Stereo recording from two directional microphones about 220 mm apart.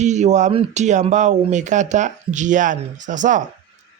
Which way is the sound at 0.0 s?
30° right (ahead or behind).